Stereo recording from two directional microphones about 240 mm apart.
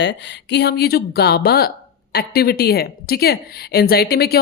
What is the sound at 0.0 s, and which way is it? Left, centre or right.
Speech, left.